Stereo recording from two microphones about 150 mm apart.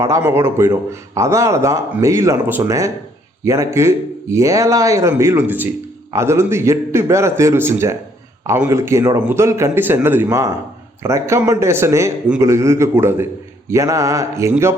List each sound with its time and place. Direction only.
0.2 s a man's voice: 15° right (ahead or behind)